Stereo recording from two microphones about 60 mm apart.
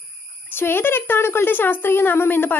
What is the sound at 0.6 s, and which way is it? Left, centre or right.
A woman's voice, left.